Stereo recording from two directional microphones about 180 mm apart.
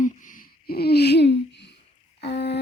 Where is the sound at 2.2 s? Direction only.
65° left (ahead or behind).